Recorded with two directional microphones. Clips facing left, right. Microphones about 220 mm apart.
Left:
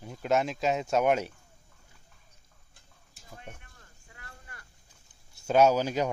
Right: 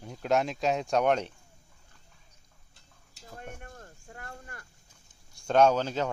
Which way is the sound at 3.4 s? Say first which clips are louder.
Right 8 dB; 50° right (ahead or behind).